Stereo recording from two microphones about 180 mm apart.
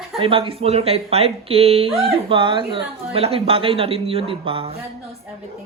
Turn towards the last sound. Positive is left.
turn(degrees=-30)  # may be behind; listen again after turning